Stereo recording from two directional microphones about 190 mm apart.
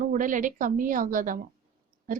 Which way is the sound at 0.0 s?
45° right (ahead or behind).